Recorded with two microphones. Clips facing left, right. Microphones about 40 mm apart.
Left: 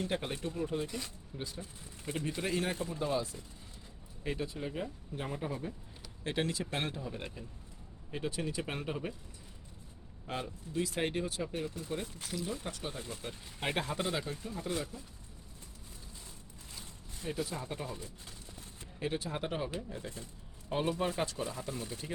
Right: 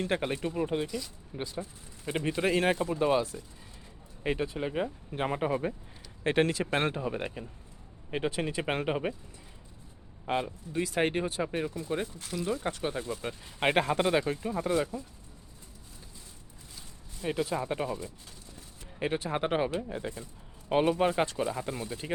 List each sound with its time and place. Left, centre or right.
0.0 s speech: right
0.4 s speech: right
0.9 s speech: left
1.3 s speech: right
2.0 s speech: right
4.2 s speech: right
10.2 s speech: right
12.3 s speech: right
12.6 s speech: right
13.2 s speech: right
14.4 s speech: right
17.4 s speech: right
18.9 s speech: right